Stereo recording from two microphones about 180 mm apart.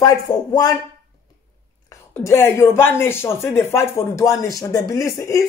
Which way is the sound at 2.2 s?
15° left (ahead or behind).